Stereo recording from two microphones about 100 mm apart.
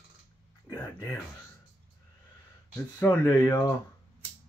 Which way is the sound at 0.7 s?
20° left (ahead or behind).